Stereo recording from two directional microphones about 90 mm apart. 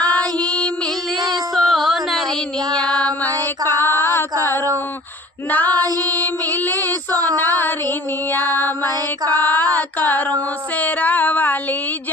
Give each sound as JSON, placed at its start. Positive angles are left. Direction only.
{"t": 1.5, "sound": "music", "side_deg": 0}
{"t": 2.8, "sound": "child singing", "side_deg": 10}
{"t": 3.6, "sound": "female singing", "side_deg": 25}
{"t": 4.0, "sound": "singing", "side_deg": 25}
{"t": 6.0, "sound": "mantra", "side_deg": 20}
{"t": 8.5, "sound": "music", "side_deg": 25}
{"t": 8.8, "sound": "mantra", "side_deg": -45}
{"t": 9.4, "sound": "a sound", "side_deg": 20}